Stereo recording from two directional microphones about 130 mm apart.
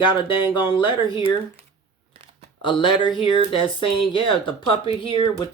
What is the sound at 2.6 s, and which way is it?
Speech, 40° left (ahead or behind).